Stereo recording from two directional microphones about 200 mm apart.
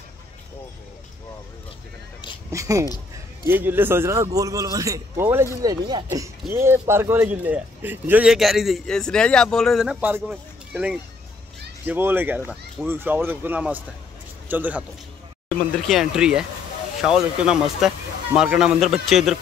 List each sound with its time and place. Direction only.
2.5 s a man's voice: 15° right (ahead or behind)